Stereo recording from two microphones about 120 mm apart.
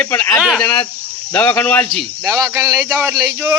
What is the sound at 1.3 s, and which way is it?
Speech, 15° left (ahead or behind).